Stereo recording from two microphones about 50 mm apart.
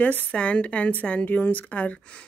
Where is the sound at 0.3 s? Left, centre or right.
Left.